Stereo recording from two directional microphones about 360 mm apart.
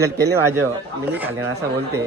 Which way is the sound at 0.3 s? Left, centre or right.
Centre.